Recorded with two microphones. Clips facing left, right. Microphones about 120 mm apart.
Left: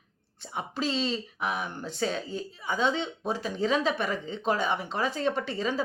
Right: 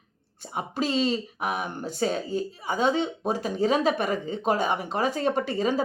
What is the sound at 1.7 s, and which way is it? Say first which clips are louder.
Speech: right 4 dB; 15° right (ahead or behind).